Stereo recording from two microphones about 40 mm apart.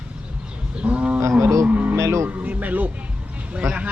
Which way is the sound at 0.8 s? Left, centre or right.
Right.